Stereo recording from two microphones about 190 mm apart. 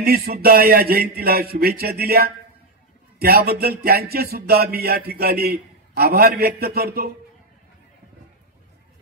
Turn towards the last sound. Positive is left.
turn(degrees=-55)  # may be behind; listen again after turning